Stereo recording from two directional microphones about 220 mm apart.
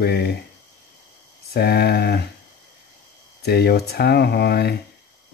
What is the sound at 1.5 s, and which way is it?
Speech, 45° left (ahead or behind).